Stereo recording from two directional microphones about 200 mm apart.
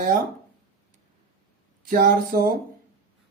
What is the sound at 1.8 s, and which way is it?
Speech, 45° right (ahead or behind).